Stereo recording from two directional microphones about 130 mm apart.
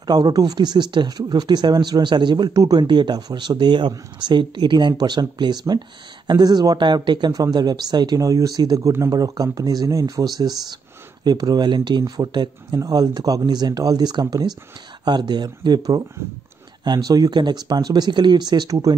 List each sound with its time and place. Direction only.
0.0 s speech: 30° right (ahead or behind)